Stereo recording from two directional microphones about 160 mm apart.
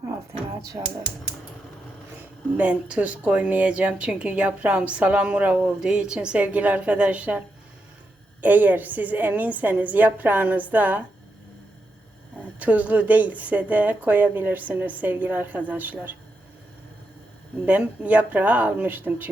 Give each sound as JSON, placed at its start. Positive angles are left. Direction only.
{"t": 2.6, "sound": "a woman's voice", "side_deg": -10}
{"t": 12.4, "sound": "a woman's voice", "side_deg": -10}
{"t": 17.7, "sound": "a woman's voice", "side_deg": -10}